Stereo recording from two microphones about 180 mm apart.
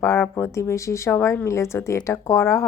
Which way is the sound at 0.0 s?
15° left (ahead or behind).